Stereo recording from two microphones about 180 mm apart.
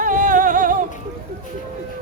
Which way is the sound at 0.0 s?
45° right (ahead or behind).